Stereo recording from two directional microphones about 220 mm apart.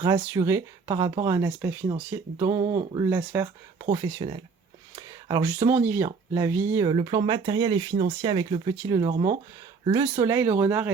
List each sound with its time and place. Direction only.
0.0 s speech: 15° right (ahead or behind)